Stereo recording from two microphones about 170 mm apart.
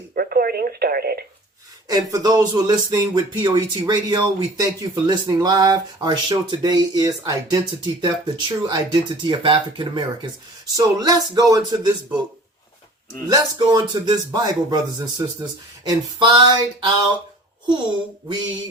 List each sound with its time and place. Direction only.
0.1 s telephone: 60° right (ahead or behind)
1.9 s speech: 20° right (ahead or behind)
13.2 s speech: 25° right (ahead or behind)